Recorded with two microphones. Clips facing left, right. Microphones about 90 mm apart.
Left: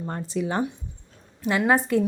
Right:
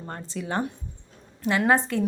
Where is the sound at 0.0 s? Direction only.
15° left (ahead or behind).